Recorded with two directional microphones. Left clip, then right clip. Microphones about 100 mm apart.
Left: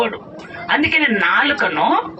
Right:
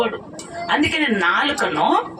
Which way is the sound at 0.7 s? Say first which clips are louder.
Left 3 dB; 20° right (ahead or behind).